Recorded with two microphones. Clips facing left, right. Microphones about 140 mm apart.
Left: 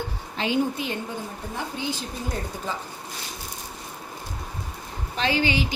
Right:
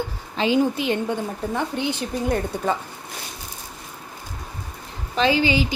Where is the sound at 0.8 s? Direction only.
85° right.